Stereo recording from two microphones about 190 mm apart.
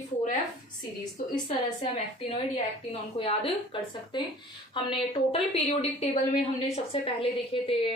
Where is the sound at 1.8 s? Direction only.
30° left (ahead or behind).